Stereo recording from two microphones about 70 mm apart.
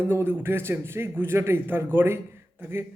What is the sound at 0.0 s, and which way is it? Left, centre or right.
Speech, right.